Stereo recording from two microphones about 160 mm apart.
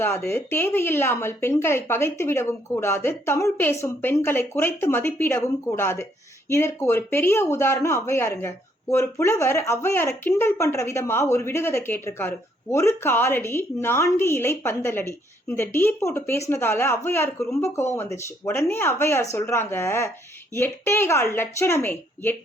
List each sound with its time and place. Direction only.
0.3 s a woman's voice: 15° left (ahead or behind)